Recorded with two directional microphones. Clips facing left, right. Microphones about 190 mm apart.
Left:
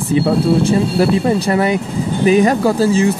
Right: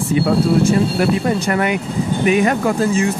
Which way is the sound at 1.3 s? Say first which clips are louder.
Left 3 dB; 30° left (ahead or behind).